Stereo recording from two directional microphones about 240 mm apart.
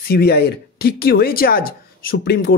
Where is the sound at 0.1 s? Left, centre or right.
Left.